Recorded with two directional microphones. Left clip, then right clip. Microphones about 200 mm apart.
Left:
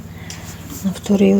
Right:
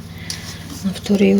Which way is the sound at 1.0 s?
5° left (ahead or behind).